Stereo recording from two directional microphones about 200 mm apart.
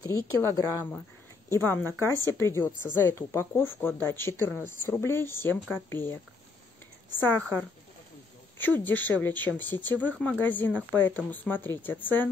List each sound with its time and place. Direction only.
0.0 s speech: 15° left (ahead or behind)
7.2 s speech: 10° left (ahead or behind)